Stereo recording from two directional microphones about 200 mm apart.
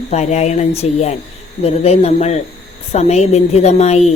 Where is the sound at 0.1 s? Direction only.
35° left (ahead or behind).